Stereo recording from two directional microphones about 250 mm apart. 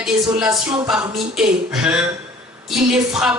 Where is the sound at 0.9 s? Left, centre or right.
Centre.